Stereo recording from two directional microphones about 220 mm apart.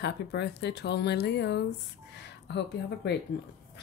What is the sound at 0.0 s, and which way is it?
Speech, 50° left (ahead or behind).